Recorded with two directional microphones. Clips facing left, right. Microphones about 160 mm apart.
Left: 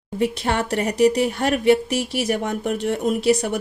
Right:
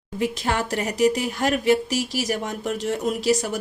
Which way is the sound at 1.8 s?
60° left (ahead or behind).